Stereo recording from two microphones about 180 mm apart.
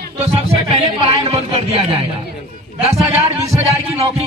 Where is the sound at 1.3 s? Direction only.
30° right (ahead or behind).